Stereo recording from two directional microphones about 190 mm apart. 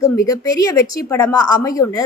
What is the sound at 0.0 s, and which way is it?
A woman's voice, 20° left (ahead or behind).